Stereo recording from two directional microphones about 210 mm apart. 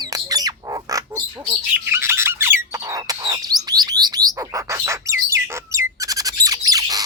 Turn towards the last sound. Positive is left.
turn(degrees=-15)  # may be behind; listen again after turning